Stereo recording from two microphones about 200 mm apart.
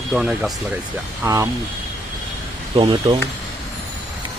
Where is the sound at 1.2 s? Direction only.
15° right (ahead or behind).